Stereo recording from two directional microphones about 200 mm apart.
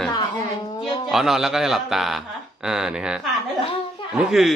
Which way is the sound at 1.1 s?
Centre (ahead or behind).